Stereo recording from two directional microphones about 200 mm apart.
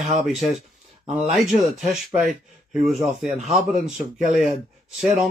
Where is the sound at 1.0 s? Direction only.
5° right (ahead or behind).